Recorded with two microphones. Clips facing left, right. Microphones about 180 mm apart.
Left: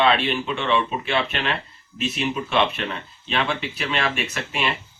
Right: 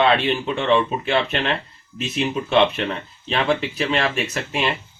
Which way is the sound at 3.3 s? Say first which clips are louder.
Right 4 dB; 35° right (ahead or behind).